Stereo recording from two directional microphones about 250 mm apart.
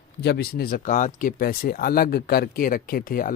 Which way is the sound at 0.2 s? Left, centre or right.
Left.